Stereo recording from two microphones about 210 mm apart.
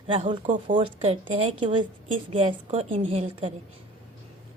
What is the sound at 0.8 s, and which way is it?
A woman's voice, 25° right (ahead or behind).